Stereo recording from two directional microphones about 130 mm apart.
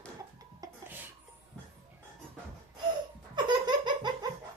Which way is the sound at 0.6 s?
30° right (ahead or behind).